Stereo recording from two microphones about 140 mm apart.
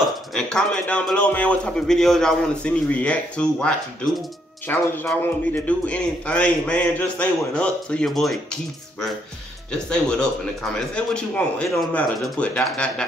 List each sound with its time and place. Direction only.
0.3 s a man's voice: 5° left (ahead or behind)
9.7 s a man's voice: 5° left (ahead or behind)